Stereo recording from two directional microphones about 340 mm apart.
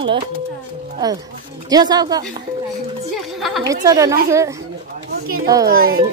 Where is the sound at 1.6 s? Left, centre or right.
Centre.